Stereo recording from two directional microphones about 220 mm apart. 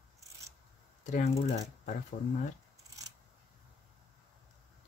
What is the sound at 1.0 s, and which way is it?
Speech, 30° left (ahead or behind).